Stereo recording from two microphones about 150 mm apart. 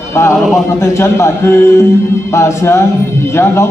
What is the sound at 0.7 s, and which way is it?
A man's voice, 20° left (ahead or behind).